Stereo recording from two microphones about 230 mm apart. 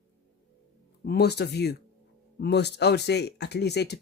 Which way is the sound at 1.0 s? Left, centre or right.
Left.